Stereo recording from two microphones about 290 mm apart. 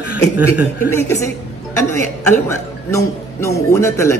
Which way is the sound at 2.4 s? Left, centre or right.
Centre.